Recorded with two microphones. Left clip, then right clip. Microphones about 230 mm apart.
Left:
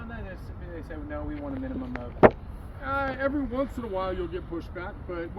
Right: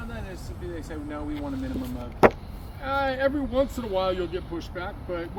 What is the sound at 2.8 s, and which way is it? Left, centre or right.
Speech, centre.